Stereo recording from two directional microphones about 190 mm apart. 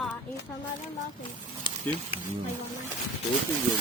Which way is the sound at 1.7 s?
25° left (ahead or behind).